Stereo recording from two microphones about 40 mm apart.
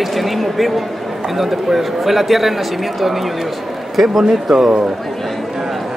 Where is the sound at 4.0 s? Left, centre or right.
Centre.